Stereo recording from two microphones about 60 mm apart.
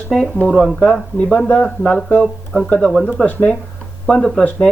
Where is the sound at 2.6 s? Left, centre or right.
Centre.